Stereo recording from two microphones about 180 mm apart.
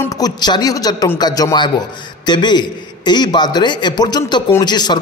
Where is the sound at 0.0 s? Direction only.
20° left (ahead or behind).